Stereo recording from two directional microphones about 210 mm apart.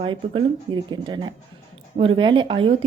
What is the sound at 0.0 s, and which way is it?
A woman's voice, 25° right (ahead or behind).